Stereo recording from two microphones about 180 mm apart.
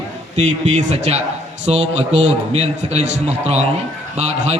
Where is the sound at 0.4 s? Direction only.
40° right (ahead or behind).